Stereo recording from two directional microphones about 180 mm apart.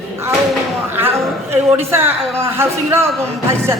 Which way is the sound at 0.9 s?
10° right (ahead or behind).